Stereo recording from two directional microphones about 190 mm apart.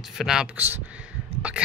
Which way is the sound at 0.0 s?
Centre (ahead or behind).